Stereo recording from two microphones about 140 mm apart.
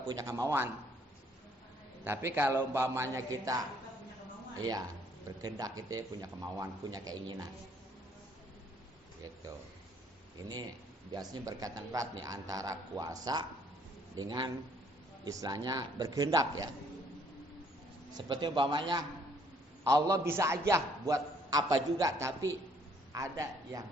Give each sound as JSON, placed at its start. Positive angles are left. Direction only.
{"t": 0.1, "sound": "a man's voice", "side_deg": -25}
{"t": 2.0, "sound": "a man's voice", "side_deg": -15}
{"t": 11.1, "sound": "a man's voice", "side_deg": -25}
{"t": 18.2, "sound": "a man's voice", "side_deg": -35}
{"t": 19.9, "sound": "a man's voice", "side_deg": -20}